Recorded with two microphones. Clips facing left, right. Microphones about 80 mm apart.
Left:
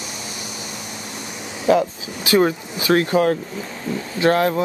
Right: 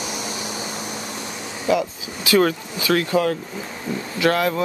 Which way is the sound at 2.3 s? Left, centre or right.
Left.